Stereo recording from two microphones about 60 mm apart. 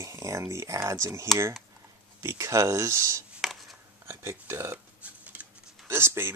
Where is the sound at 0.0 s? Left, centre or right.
Right.